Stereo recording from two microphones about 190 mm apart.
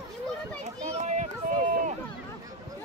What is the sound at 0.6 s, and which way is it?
Run, 35° right (ahead or behind).